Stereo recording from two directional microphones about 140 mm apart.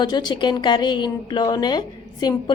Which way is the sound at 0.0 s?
30° left (ahead or behind).